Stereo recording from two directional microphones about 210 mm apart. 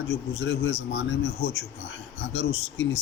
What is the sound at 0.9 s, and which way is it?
Speech, 55° left (ahead or behind).